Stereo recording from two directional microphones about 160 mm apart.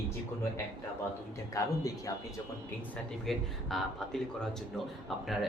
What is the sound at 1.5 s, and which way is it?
Speech, 20° left (ahead or behind).